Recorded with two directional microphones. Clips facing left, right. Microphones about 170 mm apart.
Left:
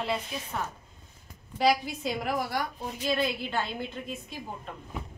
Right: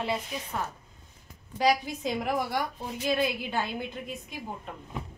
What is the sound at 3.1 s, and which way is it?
A woman's voice, 10° right (ahead or behind).